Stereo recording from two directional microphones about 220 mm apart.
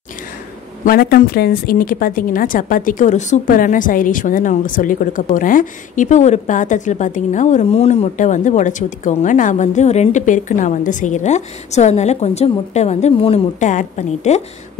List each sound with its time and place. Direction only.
0.8 s a woman's voice: 40° left (ahead or behind)